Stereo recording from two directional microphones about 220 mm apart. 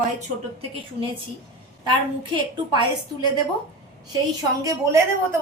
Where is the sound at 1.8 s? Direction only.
20° right (ahead or behind).